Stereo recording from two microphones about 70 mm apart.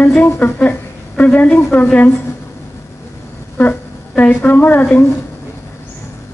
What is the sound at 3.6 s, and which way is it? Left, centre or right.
A woman's voice, left.